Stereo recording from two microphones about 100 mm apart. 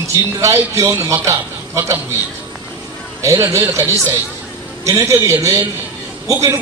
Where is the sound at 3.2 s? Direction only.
30° right (ahead or behind).